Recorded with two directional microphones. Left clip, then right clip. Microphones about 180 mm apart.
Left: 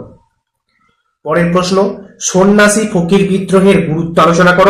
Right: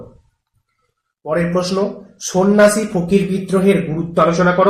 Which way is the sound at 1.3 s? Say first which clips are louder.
Left 6 dB; centre (ahead or behind).